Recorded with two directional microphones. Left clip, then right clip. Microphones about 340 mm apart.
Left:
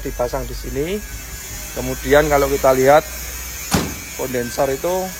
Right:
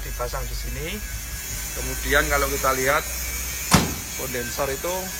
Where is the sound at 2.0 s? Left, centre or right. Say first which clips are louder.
Left 7 dB; centre.